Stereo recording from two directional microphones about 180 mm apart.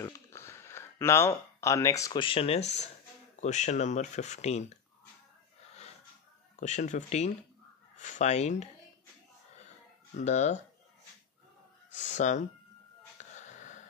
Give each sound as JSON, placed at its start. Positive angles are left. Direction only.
{"t": 0.0, "sound": "a sound", "side_deg": 15}
{"t": 2.2, "sound": "speech", "side_deg": 35}
{"t": 6.6, "sound": "speech", "side_deg": 40}
{"t": 10.1, "sound": "speech", "side_deg": 40}
{"t": 12.2, "sound": "speech", "side_deg": 40}
{"t": 13.2, "sound": "gasp", "side_deg": 40}